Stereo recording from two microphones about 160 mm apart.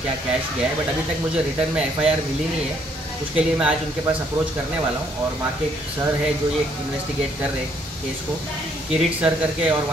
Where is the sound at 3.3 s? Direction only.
5° right (ahead or behind).